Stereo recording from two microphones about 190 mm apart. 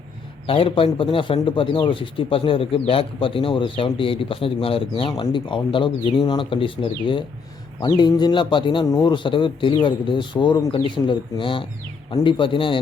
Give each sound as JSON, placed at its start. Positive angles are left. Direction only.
{"t": 0.4, "sound": "a man's voice", "side_deg": 30}